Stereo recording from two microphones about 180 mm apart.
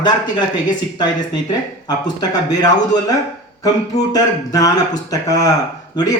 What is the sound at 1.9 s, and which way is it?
Speech, 20° left (ahead or behind).